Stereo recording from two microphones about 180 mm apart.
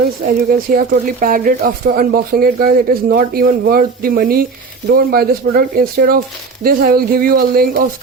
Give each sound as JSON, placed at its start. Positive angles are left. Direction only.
{"t": 0.7, "sound": "speech", "side_deg": -55}